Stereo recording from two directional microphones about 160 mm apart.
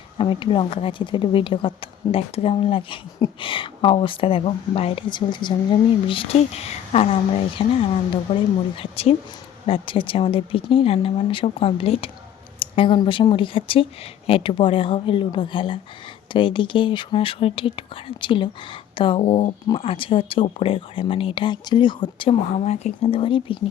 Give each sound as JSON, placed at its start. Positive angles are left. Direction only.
{"t": 0.2, "sound": "speech", "side_deg": 35}